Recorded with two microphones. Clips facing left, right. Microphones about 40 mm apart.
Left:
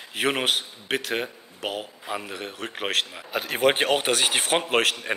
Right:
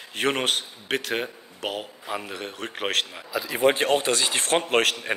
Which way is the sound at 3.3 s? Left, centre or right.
Left.